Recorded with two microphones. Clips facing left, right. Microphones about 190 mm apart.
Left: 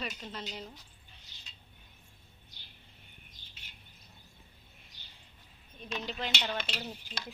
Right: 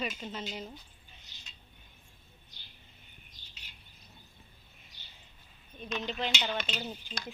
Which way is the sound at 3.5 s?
50° left (ahead or behind).